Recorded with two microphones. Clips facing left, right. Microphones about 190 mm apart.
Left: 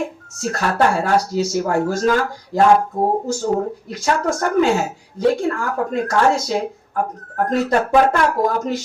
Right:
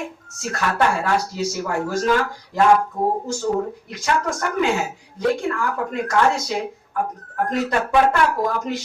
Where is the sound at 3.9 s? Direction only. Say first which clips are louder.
Left 5 dB; 40° left (ahead or behind).